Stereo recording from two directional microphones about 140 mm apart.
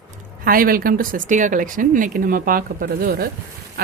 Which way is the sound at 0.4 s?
90° right.